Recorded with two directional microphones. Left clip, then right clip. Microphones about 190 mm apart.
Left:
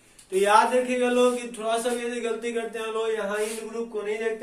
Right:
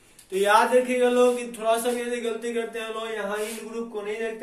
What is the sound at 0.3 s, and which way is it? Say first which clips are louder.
Speech: even; 10° right (ahead or behind).